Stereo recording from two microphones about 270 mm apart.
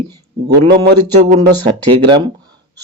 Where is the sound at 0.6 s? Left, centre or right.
Right.